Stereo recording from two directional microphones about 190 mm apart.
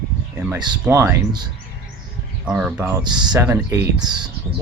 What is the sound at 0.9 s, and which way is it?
Speech, 15° right (ahead or behind).